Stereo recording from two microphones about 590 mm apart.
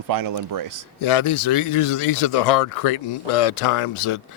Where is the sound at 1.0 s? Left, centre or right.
Left.